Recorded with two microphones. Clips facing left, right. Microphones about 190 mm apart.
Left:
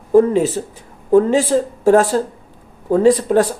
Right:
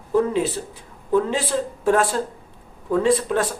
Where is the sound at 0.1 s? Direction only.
45° left (ahead or behind).